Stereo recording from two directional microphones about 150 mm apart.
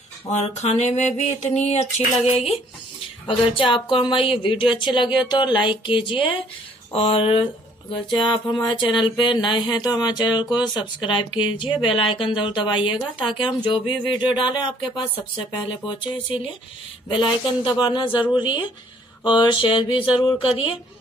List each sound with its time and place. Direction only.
0.3 s speech: 50° left (ahead or behind)